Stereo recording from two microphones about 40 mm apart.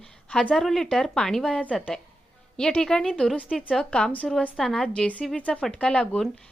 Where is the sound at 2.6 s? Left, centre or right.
Centre.